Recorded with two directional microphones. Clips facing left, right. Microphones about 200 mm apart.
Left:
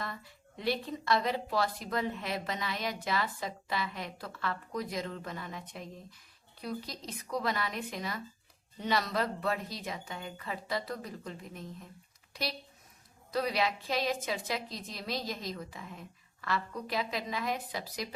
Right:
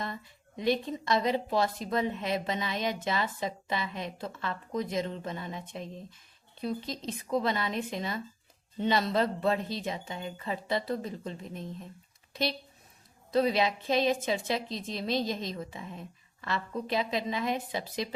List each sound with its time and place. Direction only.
0.0 s a woman's voice: 20° right (ahead or behind)